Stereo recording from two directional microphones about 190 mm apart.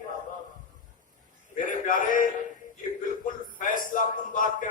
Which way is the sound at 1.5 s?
45° left (ahead or behind).